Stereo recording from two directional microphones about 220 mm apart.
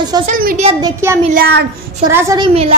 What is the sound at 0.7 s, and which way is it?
Speech, 15° right (ahead or behind).